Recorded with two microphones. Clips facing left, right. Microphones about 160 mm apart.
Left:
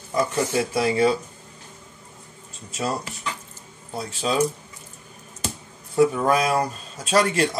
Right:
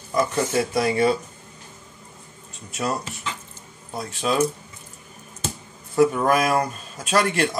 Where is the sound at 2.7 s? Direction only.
30° left (ahead or behind).